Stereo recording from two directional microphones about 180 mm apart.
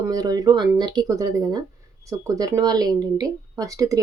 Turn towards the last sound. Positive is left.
turn(degrees=-20)  # may be behind; listen again after turning